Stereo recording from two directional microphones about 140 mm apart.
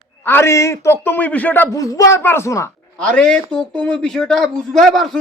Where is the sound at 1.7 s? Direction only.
25° left (ahead or behind).